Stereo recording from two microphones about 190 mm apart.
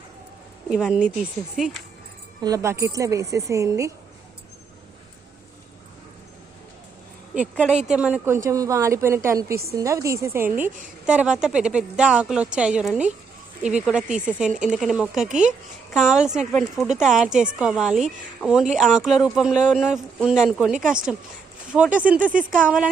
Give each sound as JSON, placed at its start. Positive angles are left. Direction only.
{"t": 0.7, "sound": "a woman's voice", "side_deg": -5}
{"t": 2.4, "sound": "a woman's voice", "side_deg": -15}
{"t": 7.3, "sound": "a woman's voice", "side_deg": -5}